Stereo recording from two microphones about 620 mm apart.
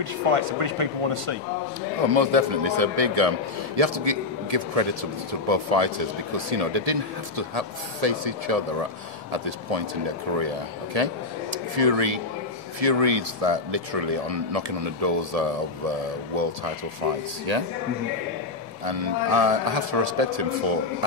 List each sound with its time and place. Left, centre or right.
0.0 s speech: right
10.3 s speech: right
17.5 s speech: right
18.9 s speech: right